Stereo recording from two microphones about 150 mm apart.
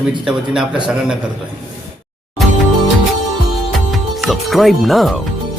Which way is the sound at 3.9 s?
Centre (ahead or behind).